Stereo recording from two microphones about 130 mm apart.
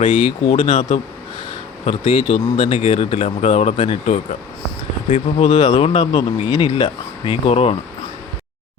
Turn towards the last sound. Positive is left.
turn(degrees=50)  # may be behind; listen again after turning